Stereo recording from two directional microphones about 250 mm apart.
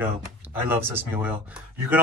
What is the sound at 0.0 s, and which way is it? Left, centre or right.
Speech, centre.